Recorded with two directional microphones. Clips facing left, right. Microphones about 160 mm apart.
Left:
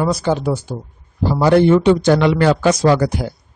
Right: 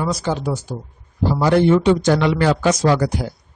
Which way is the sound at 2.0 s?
55° left (ahead or behind).